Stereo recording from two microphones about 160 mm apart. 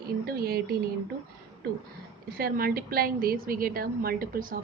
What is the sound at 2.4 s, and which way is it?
A woman's voice, 70° right (ahead or behind).